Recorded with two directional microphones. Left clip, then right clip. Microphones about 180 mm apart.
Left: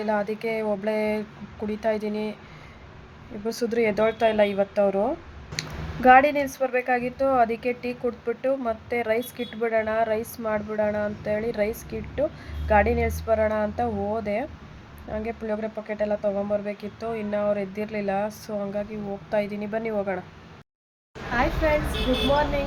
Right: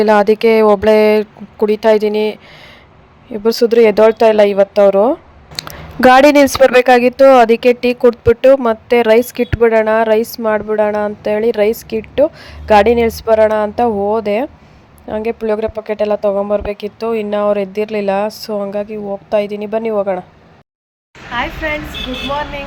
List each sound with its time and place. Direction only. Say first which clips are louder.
0.0 s speech: right 17 dB; 55° right (ahead or behind)
3.4 s speech: right 15 dB; 50° right (ahead or behind)
21.3 s speech: right 4 dB; centre (ahead or behind)